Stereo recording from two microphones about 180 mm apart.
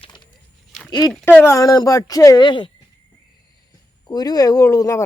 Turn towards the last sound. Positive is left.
turn(degrees=20)  # may be behind; listen again after turning